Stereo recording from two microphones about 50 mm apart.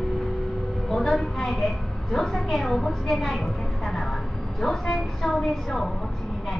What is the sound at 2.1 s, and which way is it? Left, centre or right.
A woman's voice, centre.